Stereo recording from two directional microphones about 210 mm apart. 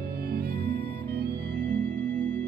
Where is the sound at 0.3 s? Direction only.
45° right (ahead or behind).